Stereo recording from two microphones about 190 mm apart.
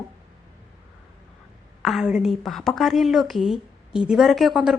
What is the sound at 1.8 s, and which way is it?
A woman's voice, centre (ahead or behind).